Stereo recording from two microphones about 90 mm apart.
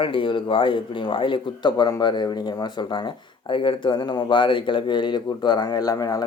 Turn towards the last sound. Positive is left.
turn(degrees=45)  # may be behind; listen again after turning